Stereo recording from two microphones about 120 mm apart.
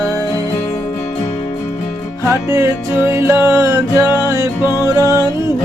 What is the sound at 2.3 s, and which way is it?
Music, 25° right (ahead or behind).